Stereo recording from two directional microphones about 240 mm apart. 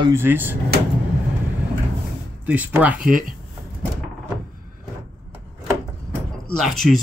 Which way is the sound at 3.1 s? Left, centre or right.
Right.